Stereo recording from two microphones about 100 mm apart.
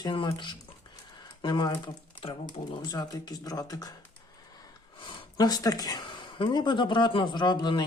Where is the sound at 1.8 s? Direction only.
55° left (ahead or behind).